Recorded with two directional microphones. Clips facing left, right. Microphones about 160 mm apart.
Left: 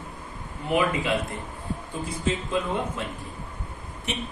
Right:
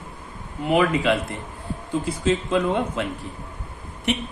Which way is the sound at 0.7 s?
90° right.